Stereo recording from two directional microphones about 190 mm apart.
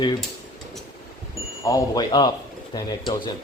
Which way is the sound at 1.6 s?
20° left (ahead or behind).